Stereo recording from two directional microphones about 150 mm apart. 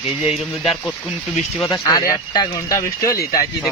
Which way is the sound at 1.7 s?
25° left (ahead or behind).